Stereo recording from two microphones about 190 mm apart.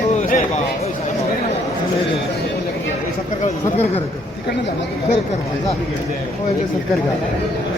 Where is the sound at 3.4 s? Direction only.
35° left (ahead or behind).